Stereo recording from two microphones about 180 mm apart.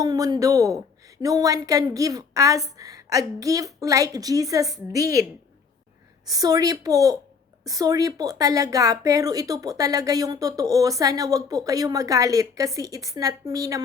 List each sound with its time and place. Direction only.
0.0 s a woman's voice: 20° right (ahead or behind)
6.2 s a woman's voice: 20° right (ahead or behind)